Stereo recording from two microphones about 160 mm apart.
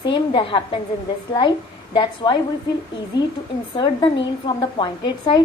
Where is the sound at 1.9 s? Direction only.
30° left (ahead or behind).